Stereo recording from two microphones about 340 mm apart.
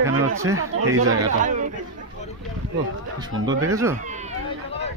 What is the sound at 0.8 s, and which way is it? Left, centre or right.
Speech, right.